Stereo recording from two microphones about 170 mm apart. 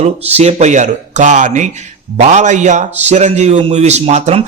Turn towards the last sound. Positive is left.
turn(degrees=-40)  # may be behind; listen again after turning